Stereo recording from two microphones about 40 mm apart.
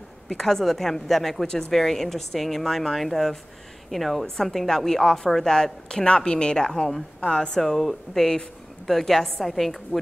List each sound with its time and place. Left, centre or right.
0.3 s a woman's voice: centre
7.5 s a woman's voice: centre